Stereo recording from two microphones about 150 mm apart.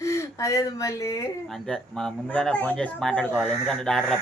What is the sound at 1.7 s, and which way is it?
Speech, 5° left (ahead or behind).